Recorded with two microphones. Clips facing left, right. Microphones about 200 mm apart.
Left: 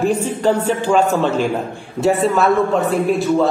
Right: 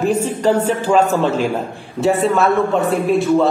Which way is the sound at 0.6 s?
40° right (ahead or behind).